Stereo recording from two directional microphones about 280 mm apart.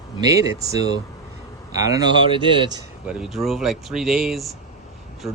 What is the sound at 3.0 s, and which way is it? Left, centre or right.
Speech, centre.